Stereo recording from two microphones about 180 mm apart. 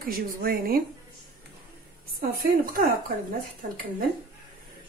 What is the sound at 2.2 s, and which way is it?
Speech, 55° right (ahead or behind).